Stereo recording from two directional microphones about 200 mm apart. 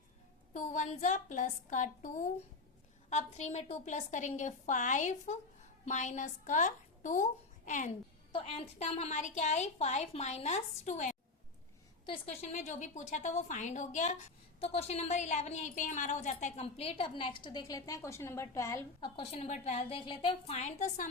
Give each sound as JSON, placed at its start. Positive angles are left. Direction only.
{"t": 0.5, "sound": "a woman's voice", "side_deg": 35}
{"t": 8.3, "sound": "a woman's voice", "side_deg": 30}
{"t": 18.9, "sound": "a woman's voice", "side_deg": 25}